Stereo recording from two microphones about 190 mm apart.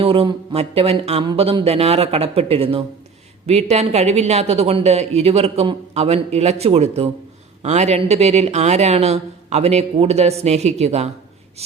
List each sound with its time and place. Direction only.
0.0 s speech: 30° right (ahead or behind)